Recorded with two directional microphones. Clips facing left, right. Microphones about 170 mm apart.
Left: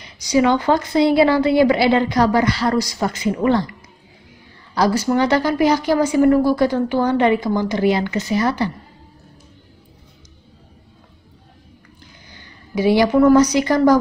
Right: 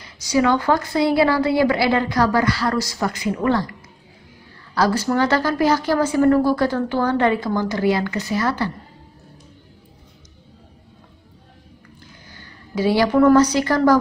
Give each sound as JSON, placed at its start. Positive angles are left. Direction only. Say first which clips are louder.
{"t": 0.0, "sound": "a woman's voice", "louder": "left 2 dB", "side_deg": 20}
{"t": 4.7, "sound": "a woman's voice", "louder": "left 2 dB", "side_deg": 15}
{"t": 12.3, "sound": "a woman's voice", "louder": "left 3 dB", "side_deg": 15}